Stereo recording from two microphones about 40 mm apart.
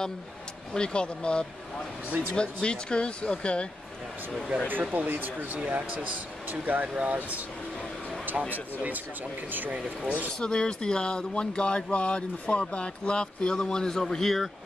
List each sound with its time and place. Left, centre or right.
0.7 s speech: left
4.9 s speech: right
5.6 s speech: right
10.4 s speech: left